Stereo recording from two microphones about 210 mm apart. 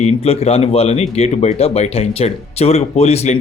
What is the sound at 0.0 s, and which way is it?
A man's voice, 30° left (ahead or behind).